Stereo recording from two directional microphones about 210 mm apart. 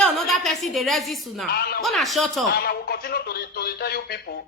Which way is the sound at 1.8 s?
Centre (ahead or behind).